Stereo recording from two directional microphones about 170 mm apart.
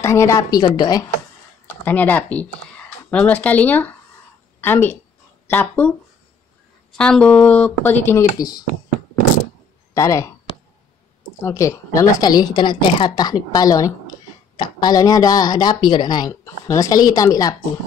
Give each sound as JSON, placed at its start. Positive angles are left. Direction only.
{"t": 0.0, "sound": "speech", "side_deg": 15}
{"t": 1.7, "sound": "a woman's voice", "side_deg": 10}
{"t": 9.9, "sound": "speech", "side_deg": 20}
{"t": 11.4, "sound": "speech", "side_deg": 15}